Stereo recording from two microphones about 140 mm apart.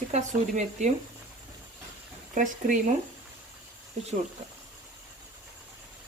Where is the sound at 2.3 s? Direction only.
65° right (ahead or behind).